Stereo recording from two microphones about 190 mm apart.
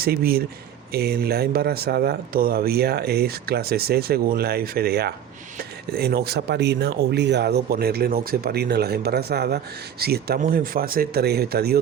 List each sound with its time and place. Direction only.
0.0 s speech: 55° right (ahead or behind)